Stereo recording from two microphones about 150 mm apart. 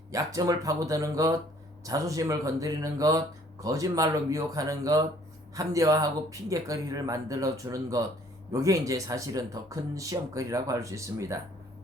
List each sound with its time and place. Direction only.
0.1 s speech: 20° right (ahead or behind)